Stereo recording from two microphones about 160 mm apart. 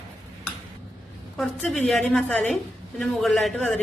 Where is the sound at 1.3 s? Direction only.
Centre (ahead or behind).